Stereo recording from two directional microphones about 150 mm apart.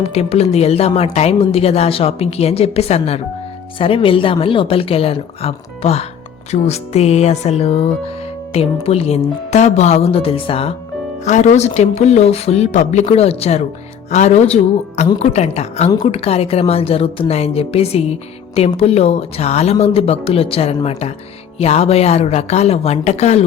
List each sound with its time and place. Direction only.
0.0 s speech: 40° left (ahead or behind)
11.3 s speech: 50° left (ahead or behind)